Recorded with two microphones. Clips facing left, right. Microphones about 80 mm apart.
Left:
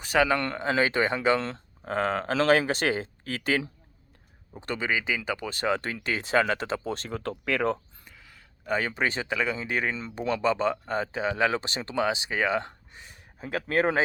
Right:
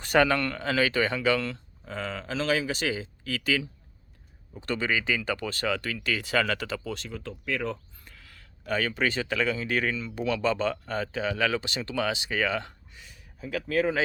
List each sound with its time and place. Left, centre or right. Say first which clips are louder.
0.0 s speech: right 1 dB; centre
0.3 s speech: left 1 dB; left
1.8 s speech: left 8 dB; left
4.5 s speech: right 1 dB; centre; by 7.2 s left
7.2 s speech: left 5 dB; left
8.0 s a sound: even; centre
8.6 s speech: even; left
10.4 s speech: left 2 dB; centre; by 13.2 s left
13.4 s speech: left 1 dB; left